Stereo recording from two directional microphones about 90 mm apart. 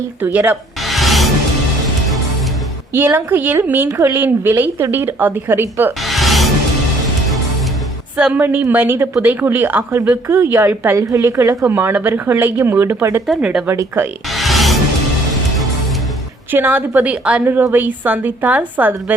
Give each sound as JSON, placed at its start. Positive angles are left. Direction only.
{"t": 0.8, "sound": "music", "side_deg": 0}
{"t": 2.9, "sound": "a woman's voice", "side_deg": -20}
{"t": 3.8, "sound": "a woman's voice", "side_deg": -35}
{"t": 4.2, "sound": "a woman's voice", "side_deg": -25}
{"t": 6.0, "sound": "music", "side_deg": 0}
{"t": 8.1, "sound": "a woman's voice", "side_deg": -15}
{"t": 10.9, "sound": "a woman's voice", "side_deg": -35}
{"t": 13.2, "sound": "speech", "side_deg": -5}
{"t": 14.3, "sound": "music", "side_deg": 0}
{"t": 16.5, "sound": "a woman's voice", "side_deg": -20}